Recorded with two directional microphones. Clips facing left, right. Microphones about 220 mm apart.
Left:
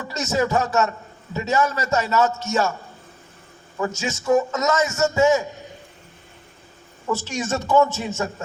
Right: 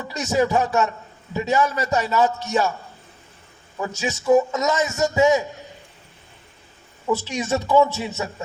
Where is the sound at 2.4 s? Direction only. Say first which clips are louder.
Even; 45° left (ahead or behind).